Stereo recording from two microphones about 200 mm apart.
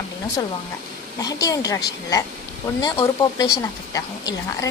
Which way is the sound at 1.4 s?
20° left (ahead or behind).